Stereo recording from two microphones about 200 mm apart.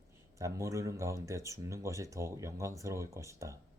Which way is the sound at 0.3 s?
15° right (ahead or behind).